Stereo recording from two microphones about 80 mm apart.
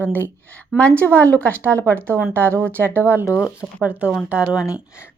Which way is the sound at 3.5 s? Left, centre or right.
Centre.